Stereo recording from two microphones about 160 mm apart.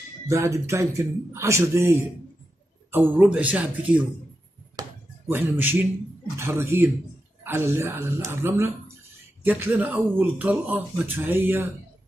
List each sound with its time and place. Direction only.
0.3 s speech: 20° right (ahead or behind)
4.8 s music: 25° right (ahead or behind)
5.3 s speech: 15° right (ahead or behind)